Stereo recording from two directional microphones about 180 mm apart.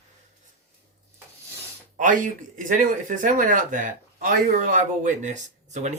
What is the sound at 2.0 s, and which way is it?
Speech, 45° right (ahead or behind).